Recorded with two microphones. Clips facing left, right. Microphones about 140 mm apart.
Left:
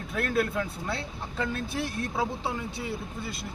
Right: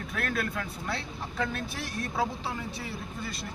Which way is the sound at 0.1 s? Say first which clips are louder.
Left 5 dB; 25° left (ahead or behind).